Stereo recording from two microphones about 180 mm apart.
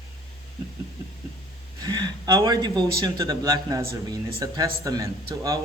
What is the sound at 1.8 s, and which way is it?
Speech, 25° right (ahead or behind).